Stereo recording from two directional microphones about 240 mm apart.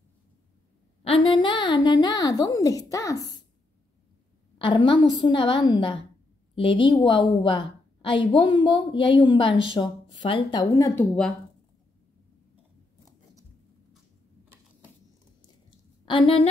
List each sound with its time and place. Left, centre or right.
1.0 s a woman's voice: left
4.6 s a woman's voice: centre
16.1 s a woman's voice: left